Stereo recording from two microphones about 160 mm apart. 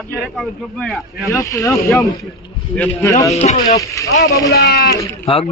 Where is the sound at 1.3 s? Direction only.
20° left (ahead or behind).